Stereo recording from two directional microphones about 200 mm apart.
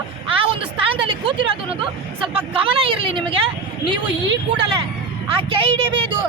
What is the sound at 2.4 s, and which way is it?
Speech, 25° right (ahead or behind).